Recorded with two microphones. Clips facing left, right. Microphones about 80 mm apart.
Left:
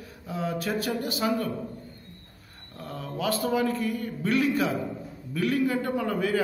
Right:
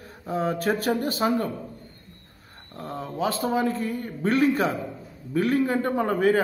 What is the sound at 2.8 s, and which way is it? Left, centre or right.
Speech, right.